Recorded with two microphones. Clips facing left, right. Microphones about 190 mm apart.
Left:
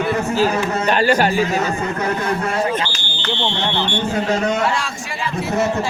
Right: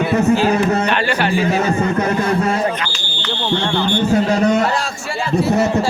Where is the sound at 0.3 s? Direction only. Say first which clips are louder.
Right 3 dB; 40° left (ahead or behind).